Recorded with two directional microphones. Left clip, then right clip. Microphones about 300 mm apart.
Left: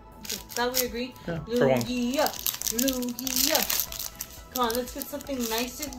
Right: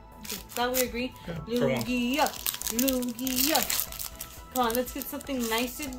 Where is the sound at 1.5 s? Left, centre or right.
Centre.